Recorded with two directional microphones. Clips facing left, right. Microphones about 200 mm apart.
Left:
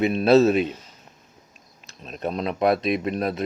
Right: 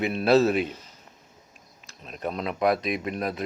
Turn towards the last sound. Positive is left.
turn(degrees=25)  # may be behind; listen again after turning